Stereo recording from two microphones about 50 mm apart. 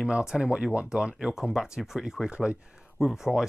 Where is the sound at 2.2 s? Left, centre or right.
Right.